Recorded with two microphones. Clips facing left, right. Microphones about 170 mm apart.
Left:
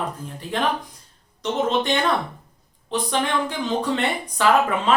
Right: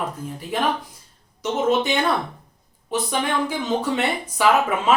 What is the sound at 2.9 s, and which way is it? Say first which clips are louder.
Speech: even; 5° right (ahead or behind).